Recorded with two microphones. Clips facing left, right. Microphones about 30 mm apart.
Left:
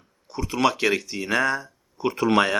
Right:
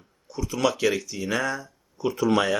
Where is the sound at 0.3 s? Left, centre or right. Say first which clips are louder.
Left 2 dB; left.